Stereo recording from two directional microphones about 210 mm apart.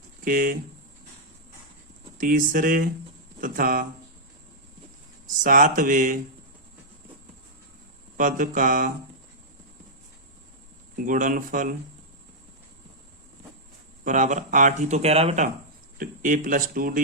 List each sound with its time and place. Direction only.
0.3 s speech: 40° right (ahead or behind)
2.1 s speech: 40° right (ahead or behind)
5.4 s speech: 40° right (ahead or behind)
8.2 s speech: 40° right (ahead or behind)
10.9 s speech: 40° right (ahead or behind)
14.0 s speech: 35° right (ahead or behind)